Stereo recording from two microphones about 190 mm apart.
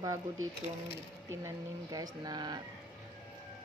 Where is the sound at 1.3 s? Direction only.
15° right (ahead or behind).